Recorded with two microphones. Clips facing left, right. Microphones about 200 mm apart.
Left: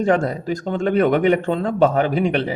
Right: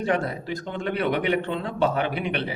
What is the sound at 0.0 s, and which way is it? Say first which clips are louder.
Speech: left 7 dB; 45° left (ahead or behind).